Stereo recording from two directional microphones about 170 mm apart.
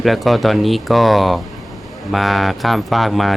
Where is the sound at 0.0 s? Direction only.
Centre (ahead or behind).